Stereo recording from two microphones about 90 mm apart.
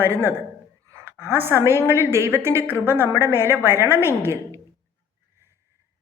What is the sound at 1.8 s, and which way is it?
A woman's voice, 30° right (ahead or behind).